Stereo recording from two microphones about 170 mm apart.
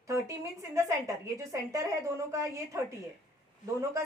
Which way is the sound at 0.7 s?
20° right (ahead or behind).